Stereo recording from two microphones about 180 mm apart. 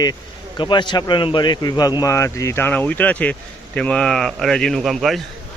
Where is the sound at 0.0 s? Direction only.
25° left (ahead or behind); by 5.2 s centre (ahead or behind).